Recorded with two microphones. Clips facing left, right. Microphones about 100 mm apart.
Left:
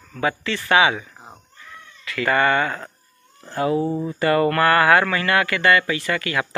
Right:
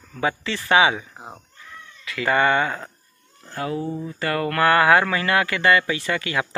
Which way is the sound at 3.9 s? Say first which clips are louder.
Left 5 dB; 35° left (ahead or behind).